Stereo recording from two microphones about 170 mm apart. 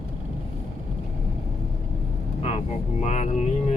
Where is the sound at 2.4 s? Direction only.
40° left (ahead or behind).